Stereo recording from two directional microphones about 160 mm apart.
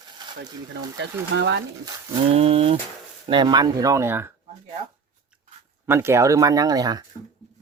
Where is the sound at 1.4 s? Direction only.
90° right.